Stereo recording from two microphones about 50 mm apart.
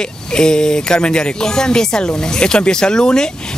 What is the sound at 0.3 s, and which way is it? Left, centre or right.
Speech, centre.